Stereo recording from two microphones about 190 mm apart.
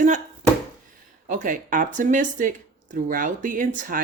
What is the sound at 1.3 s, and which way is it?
Speech, 45° right (ahead or behind).